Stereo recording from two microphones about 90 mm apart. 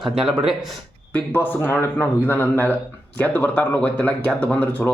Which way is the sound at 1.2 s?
20° left (ahead or behind).